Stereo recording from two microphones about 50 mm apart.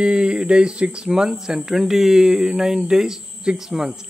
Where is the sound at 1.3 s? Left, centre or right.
Centre.